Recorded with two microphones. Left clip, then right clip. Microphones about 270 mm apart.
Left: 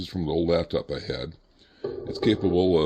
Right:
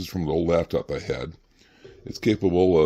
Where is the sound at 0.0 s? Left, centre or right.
Right.